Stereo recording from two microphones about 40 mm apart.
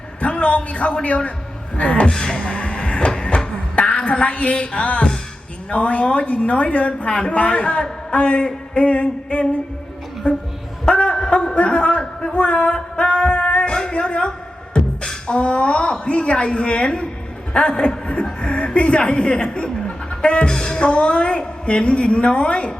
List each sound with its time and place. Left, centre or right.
0.2 s a woman's voice: left
2.0 s speech: centre
2.4 s a sound: left
5.7 s speech: left
10.3 s speech: left
10.8 s a sound: left
15.3 s speech: left